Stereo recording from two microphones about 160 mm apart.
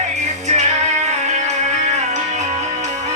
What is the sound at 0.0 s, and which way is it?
Music, 45° right (ahead or behind).